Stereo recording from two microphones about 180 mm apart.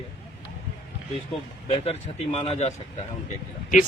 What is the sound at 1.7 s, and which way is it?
Speech, 35° left (ahead or behind).